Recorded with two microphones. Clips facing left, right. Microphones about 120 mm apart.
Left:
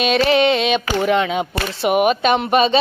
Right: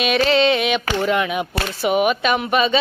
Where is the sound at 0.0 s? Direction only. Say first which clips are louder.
Left 2 dB; 25° left (ahead or behind).